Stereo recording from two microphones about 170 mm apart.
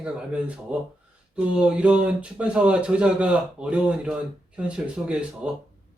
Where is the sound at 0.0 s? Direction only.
5° right (ahead or behind).